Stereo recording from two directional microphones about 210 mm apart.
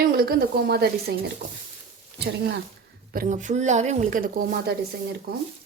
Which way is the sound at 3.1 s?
40° right (ahead or behind).